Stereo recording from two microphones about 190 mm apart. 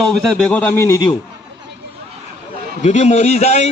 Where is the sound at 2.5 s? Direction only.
40° left (ahead or behind).